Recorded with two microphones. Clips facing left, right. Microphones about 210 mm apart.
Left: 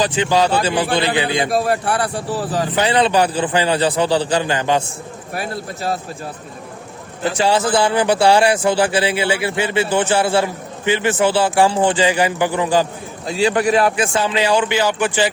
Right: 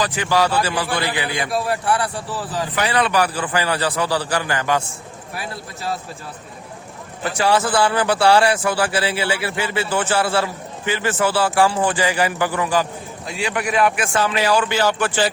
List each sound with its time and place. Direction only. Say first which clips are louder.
0.0 s speech: left 3 dB; 20° left (ahead or behind)
1.6 s a man's voice: left 2 dB; 40° left (ahead or behind)
2.7 s speech: left 3 dB; 25° left (ahead or behind)
5.3 s a man's voice: left 6 dB; 50° left (ahead or behind)
7.3 s speech: left 1 dB; 20° left (ahead or behind)